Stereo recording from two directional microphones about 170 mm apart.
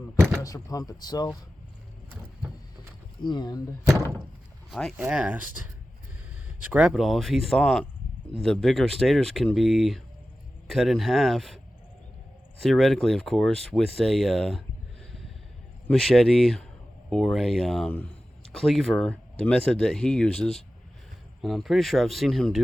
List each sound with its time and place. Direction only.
0.4 s speech: 20° left (ahead or behind)
3.2 s speech: 25° left (ahead or behind)
4.7 s speech: centre (ahead or behind)
4.9 s speech: 10° right (ahead or behind)
6.7 s speech: 5° right (ahead or behind)
12.6 s speech: centre (ahead or behind)
15.9 s speech: centre (ahead or behind)